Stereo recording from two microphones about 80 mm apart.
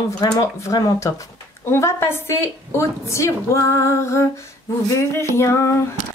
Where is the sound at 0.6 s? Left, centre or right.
Left.